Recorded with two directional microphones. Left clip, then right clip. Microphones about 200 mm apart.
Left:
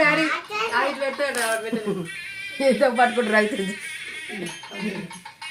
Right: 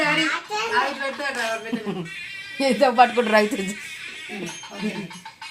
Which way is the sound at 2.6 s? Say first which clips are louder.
Right 2 dB; 30° right (ahead or behind).